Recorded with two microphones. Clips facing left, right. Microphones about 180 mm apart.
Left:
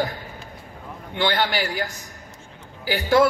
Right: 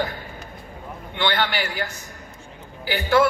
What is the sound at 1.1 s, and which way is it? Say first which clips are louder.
A man's voice: left 1 dB; 40° left (ahead or behind).